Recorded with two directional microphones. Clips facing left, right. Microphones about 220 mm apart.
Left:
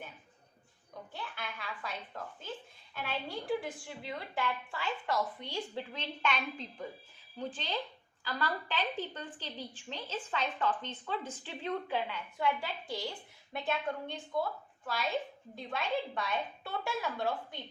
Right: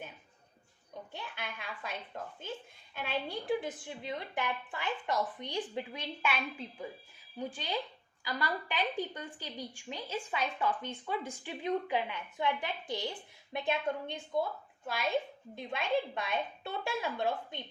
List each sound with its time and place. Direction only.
1.1 s a sound: 15° right (ahead or behind)
3.0 s a woman's voice: 20° right (ahead or behind)
15.5 s a woman's voice: 20° right (ahead or behind)